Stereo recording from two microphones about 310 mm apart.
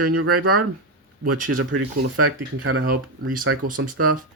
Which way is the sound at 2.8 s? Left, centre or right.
Right.